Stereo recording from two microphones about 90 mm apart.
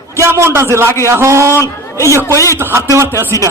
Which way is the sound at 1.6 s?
35° left (ahead or behind).